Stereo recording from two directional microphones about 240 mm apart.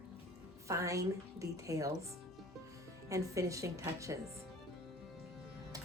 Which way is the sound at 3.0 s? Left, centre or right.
Centre.